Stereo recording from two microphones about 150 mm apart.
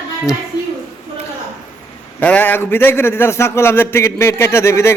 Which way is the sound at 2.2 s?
10° left (ahead or behind).